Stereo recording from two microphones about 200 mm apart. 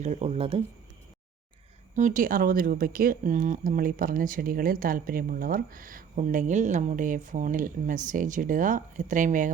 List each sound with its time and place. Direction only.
0.0 s speech: 35° right (ahead or behind)
2.0 s speech: 40° right (ahead or behind)